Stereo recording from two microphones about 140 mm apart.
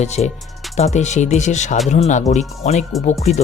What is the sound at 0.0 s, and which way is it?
Speech, 55° left (ahead or behind).